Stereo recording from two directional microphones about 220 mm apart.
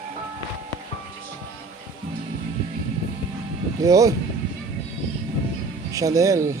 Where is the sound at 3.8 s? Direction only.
15° right (ahead or behind).